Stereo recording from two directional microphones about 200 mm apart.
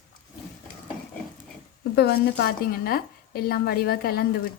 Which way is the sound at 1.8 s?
50° left (ahead or behind).